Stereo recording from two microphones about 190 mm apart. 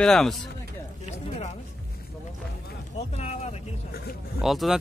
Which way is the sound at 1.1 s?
35° left (ahead or behind).